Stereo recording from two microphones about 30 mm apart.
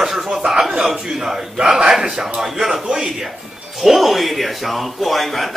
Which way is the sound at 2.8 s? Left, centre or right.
Right.